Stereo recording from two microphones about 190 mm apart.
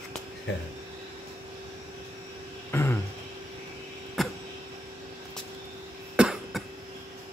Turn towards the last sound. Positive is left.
turn(degrees=-5)  # may be behind; listen again after turning